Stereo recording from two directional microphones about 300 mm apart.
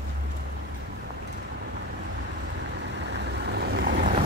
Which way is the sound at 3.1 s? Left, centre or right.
Right.